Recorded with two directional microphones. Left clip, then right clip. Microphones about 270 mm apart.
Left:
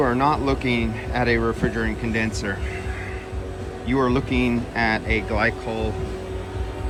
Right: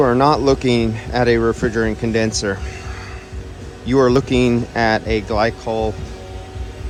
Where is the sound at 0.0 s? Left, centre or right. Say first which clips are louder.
Right 6 dB; centre.